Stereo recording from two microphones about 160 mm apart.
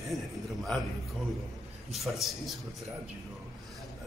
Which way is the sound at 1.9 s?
Centre (ahead or behind).